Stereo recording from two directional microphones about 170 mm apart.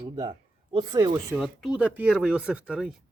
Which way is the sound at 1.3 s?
5° right (ahead or behind).